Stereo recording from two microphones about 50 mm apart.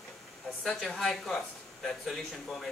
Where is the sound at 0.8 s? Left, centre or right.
Centre.